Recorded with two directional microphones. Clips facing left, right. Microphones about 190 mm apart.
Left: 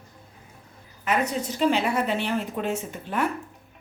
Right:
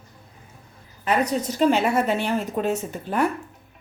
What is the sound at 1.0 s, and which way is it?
A woman's voice, 35° right (ahead or behind).